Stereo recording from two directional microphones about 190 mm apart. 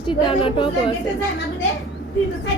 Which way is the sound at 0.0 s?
25° left (ahead or behind).